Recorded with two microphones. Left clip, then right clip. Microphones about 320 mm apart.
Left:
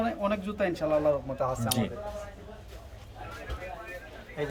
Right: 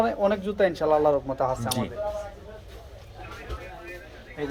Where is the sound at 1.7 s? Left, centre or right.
Centre.